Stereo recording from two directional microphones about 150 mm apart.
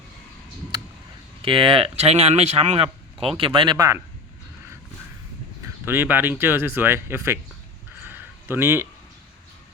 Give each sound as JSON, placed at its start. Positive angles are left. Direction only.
{"t": 1.4, "sound": "speech", "side_deg": -35}
{"t": 5.6, "sound": "speech", "side_deg": -15}
{"t": 8.0, "sound": "a sound", "side_deg": -15}